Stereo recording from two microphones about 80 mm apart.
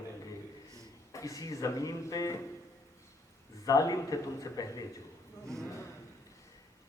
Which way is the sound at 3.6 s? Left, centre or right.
Left.